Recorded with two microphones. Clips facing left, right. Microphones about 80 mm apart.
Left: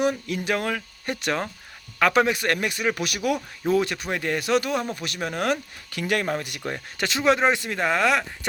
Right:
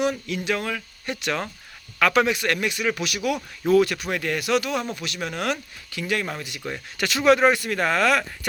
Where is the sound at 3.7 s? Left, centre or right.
Left.